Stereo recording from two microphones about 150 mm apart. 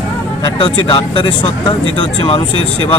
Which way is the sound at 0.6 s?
35° left (ahead or behind).